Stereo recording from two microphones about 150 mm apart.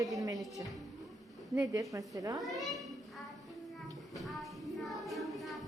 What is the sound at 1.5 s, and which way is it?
Speech, 20° right (ahead or behind).